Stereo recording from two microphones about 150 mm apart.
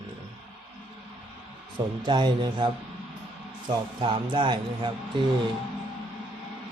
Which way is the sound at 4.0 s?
35° right (ahead or behind).